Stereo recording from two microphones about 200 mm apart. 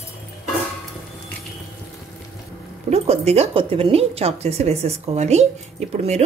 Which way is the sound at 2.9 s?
30° right (ahead or behind).